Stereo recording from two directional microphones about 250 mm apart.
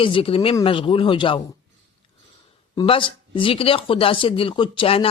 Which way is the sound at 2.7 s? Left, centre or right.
Left.